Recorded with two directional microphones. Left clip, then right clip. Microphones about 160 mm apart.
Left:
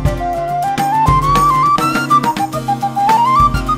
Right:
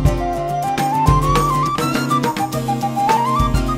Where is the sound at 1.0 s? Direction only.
5° left (ahead or behind).